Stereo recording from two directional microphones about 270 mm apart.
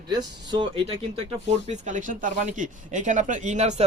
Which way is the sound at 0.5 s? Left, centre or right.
Centre.